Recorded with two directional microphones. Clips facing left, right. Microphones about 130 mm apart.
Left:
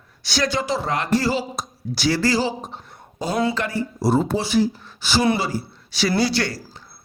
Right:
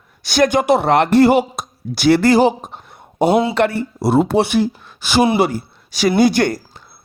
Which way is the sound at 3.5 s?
65° right (ahead or behind).